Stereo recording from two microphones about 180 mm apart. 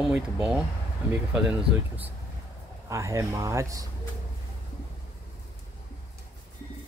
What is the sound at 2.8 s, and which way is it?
Speech, 15° right (ahead or behind).